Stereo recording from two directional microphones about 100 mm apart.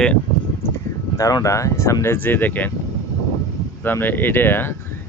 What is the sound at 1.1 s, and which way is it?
Speech, 35° left (ahead or behind).